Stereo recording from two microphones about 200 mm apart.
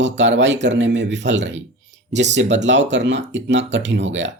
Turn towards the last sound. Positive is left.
turn(degrees=-65)  # may be behind; listen again after turning